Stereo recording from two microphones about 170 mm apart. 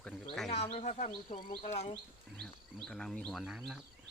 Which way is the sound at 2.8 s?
5° left (ahead or behind).